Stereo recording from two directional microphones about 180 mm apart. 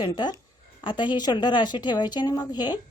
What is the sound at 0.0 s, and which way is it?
A woman's voice, 25° left (ahead or behind).